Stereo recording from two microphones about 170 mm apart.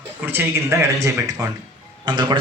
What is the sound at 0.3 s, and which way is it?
Speech, 15° right (ahead or behind).